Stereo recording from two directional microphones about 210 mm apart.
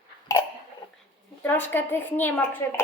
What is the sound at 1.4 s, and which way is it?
A woman's voice, 10° left (ahead or behind).